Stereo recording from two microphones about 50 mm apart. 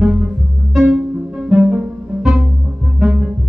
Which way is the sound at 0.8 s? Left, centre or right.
Centre.